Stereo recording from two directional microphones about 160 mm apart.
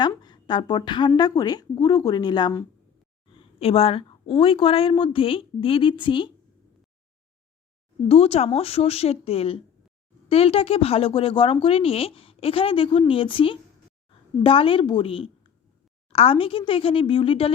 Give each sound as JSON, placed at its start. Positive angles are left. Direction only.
{"t": 0.0, "sound": "a woman's voice", "side_deg": 25}
{"t": 3.6, "sound": "a woman's voice", "side_deg": 35}
{"t": 8.0, "sound": "a woman's voice", "side_deg": 40}